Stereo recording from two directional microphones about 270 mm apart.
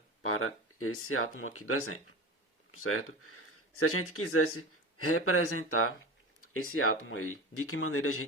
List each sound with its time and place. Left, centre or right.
0.2 s speech: left